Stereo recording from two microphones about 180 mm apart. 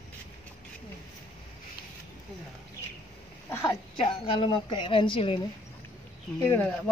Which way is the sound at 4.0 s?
30° left (ahead or behind).